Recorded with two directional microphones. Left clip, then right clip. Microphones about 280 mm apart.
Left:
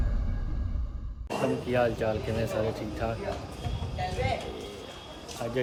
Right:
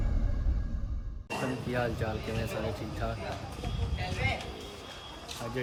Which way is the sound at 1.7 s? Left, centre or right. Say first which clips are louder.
Left 7 dB; centre.